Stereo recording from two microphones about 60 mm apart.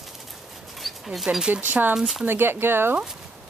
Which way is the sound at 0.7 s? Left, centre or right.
Centre.